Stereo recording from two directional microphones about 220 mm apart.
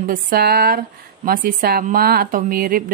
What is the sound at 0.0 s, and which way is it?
A woman's voice, 40° right (ahead or behind).